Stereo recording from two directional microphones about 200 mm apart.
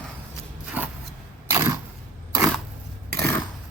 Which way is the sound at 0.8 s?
10° right (ahead or behind).